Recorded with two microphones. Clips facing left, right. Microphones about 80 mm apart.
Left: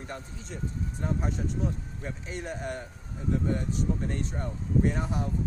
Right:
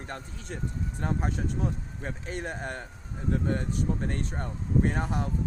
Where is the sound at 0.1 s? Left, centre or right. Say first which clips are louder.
Right 3 dB; right.